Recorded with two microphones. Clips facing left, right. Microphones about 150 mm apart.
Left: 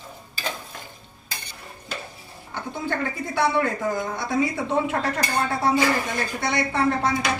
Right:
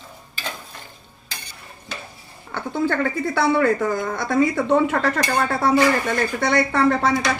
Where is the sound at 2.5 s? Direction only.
90° right; by 5.7 s 75° right (ahead or behind).